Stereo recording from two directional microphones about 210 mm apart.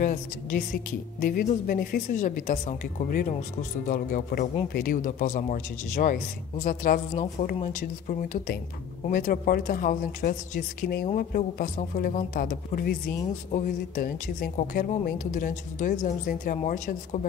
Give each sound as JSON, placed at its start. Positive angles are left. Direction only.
{"t": 1.2, "sound": "a woman's voice", "side_deg": 45}